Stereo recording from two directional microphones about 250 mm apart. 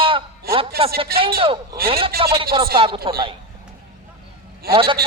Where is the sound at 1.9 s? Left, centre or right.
Right.